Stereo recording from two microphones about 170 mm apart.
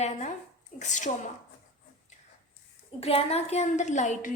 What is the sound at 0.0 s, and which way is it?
A woman's voice, 45° left (ahead or behind).